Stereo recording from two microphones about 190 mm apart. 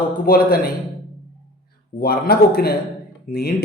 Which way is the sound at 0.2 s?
50° left (ahead or behind).